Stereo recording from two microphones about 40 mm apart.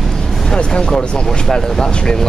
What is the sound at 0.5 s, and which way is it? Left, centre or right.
Music, centre.